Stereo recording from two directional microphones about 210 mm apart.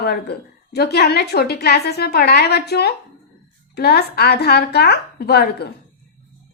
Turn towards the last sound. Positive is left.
turn(degrees=50)  # may be behind; listen again after turning